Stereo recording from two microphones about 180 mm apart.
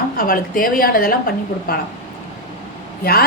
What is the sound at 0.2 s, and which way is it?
Speech, 50° left (ahead or behind).